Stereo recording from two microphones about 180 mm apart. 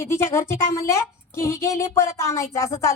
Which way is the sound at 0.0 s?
15° left (ahead or behind).